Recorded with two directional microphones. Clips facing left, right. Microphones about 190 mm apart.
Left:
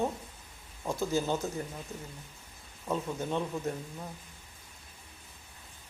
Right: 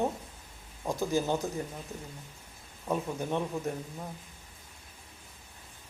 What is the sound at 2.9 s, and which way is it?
Speech, 15° right (ahead or behind).